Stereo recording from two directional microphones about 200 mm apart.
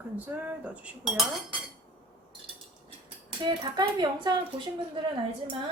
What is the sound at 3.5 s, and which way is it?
Speech, 20° right (ahead or behind).